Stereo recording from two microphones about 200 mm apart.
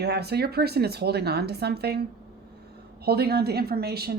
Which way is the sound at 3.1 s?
50° right (ahead or behind).